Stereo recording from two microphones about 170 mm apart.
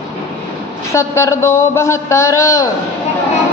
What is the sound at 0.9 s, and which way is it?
A man's voice, 15° left (ahead or behind).